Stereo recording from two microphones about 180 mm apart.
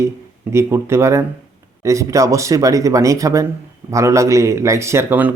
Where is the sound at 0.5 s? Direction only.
15° right (ahead or behind).